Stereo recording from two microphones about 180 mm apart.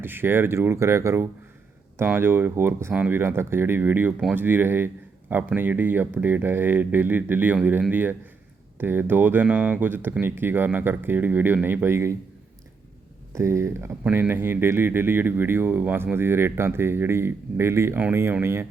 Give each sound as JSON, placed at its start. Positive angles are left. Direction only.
{"t": 0.0, "sound": "speech", "side_deg": -10}
{"t": 13.3, "sound": "speech", "side_deg": -15}